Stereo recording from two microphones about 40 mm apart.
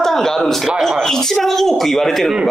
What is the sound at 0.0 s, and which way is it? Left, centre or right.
A man's voice, centre.